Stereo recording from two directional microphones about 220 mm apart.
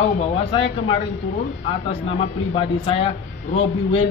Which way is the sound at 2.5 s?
25° left (ahead or behind).